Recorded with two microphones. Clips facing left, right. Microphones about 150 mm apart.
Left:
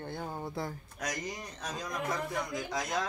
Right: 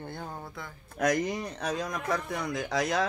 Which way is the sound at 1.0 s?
60° right (ahead or behind).